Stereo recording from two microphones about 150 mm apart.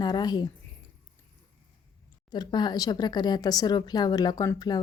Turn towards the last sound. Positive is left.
turn(degrees=25)  # may be behind; listen again after turning